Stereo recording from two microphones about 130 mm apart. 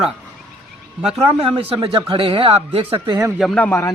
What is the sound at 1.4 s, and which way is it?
Speech, 45° right (ahead or behind).